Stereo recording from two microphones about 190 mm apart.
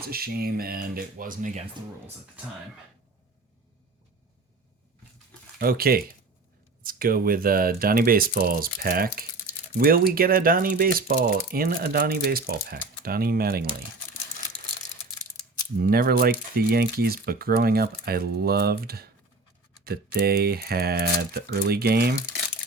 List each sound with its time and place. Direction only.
0.0 s speech: 55° right (ahead or behind)
5.5 s speech: 50° right (ahead or behind)
15.4 s speech: 50° right (ahead or behind)